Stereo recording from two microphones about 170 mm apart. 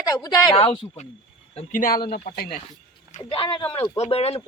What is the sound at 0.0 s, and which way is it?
Speech, 20° left (ahead or behind).